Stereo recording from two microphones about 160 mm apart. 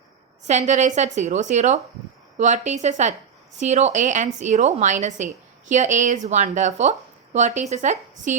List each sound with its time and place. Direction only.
0.4 s a woman's voice: 45° right (ahead or behind)